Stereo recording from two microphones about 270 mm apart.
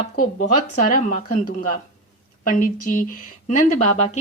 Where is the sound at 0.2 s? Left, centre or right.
Left.